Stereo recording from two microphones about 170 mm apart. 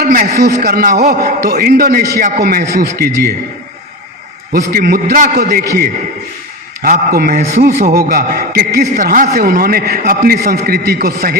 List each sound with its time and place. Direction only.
0.0 s a man's voice: 60° right (ahead or behind)
4.5 s a man's voice: 60° right (ahead or behind)
6.8 s a man's voice: 55° right (ahead or behind)
9.4 s a man's voice: 60° right (ahead or behind)